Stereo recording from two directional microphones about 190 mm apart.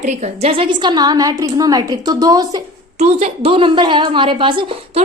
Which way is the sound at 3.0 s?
35° right (ahead or behind).